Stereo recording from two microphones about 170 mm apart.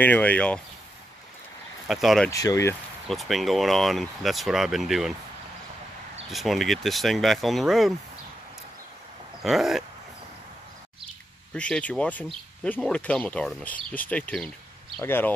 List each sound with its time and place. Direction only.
0.0 s speech: 10° left (ahead or behind)
1.9 s speech: centre (ahead or behind)
2.2 s speech: 20° left (ahead or behind)
3.1 s speech: centre (ahead or behind)
6.3 s speech: centre (ahead or behind)
9.4 s speech: centre (ahead or behind)
11.5 s speech: 5° left (ahead or behind)